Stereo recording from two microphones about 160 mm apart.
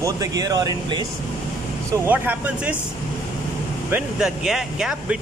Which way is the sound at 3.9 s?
5° right (ahead or behind).